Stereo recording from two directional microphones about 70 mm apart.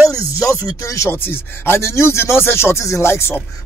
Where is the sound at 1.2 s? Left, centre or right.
Left.